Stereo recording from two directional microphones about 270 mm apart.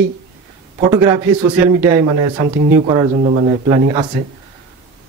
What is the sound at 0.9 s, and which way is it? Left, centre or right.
Speech, centre.